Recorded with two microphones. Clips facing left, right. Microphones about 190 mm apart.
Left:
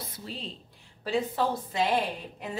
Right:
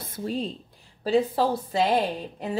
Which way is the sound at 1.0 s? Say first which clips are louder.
Right 5 dB; 35° right (ahead or behind).